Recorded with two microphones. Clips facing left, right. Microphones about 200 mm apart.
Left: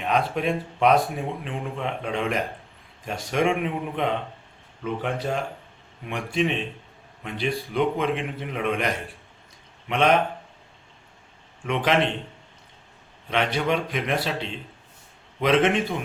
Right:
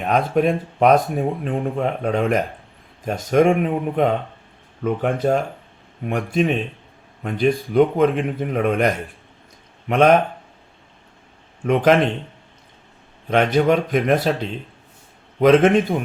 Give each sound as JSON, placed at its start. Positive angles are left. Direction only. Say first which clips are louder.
{"t": 0.0, "sound": "speech", "louder": "right 6 dB", "side_deg": -45}
{"t": 9.9, "sound": "speech", "louder": "right 6 dB", "side_deg": -45}
{"t": 11.6, "sound": "speech", "louder": "right 9 dB", "side_deg": -45}
{"t": 13.3, "sound": "speech", "louder": "right 8 dB", "side_deg": -45}
{"t": 15.4, "sound": "speech", "louder": "right 7 dB", "side_deg": -45}